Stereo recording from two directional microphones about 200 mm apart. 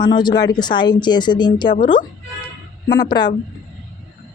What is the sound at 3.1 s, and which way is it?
Speech, 20° left (ahead or behind).